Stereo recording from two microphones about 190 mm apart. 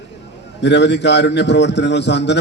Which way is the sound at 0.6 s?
65° left (ahead or behind).